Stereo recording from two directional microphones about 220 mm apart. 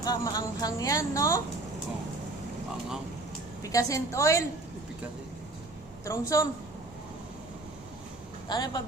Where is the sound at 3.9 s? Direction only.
15° left (ahead or behind).